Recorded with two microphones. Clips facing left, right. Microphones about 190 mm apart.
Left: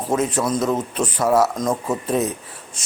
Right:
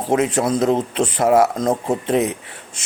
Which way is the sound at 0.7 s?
25° right (ahead or behind).